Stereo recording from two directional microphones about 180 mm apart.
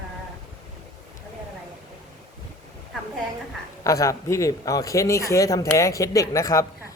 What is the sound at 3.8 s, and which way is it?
A man's voice, 15° left (ahead or behind).